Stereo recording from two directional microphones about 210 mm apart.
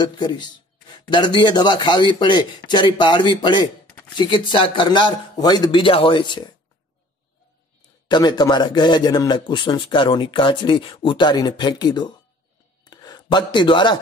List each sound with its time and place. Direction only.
0.0 s speech: 20° left (ahead or behind)
8.1 s speech: 20° left (ahead or behind)
12.8 s a sound: 20° left (ahead or behind)